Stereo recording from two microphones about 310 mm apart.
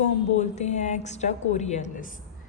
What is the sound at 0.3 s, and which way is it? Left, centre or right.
A woman's voice, left.